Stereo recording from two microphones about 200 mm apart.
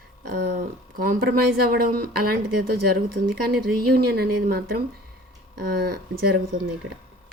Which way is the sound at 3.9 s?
50° right (ahead or behind).